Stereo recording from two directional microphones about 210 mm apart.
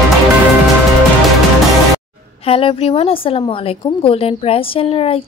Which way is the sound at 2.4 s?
25° left (ahead or behind).